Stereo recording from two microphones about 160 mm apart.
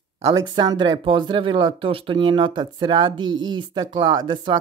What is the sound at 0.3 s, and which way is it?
Speech, 25° right (ahead or behind).